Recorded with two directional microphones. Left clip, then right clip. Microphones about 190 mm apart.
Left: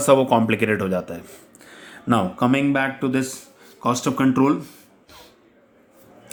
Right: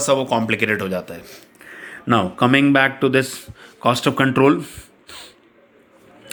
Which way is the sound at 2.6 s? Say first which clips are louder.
Right 6 dB; 25° right (ahead or behind).